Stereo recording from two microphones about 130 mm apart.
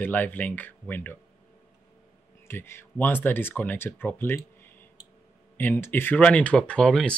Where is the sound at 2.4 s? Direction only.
20° left (ahead or behind).